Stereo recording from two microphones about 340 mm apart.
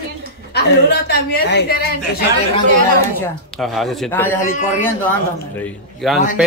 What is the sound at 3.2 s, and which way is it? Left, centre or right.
Speech, centre.